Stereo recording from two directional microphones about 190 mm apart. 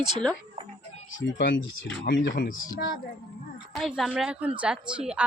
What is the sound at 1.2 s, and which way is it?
Speech, 65° left (ahead or behind).